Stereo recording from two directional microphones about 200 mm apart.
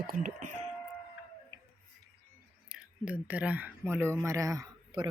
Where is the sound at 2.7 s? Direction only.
5° right (ahead or behind).